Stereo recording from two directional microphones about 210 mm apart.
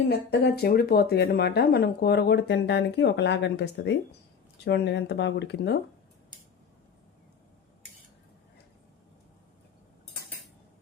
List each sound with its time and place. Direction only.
0.1 s speech: 50° left (ahead or behind)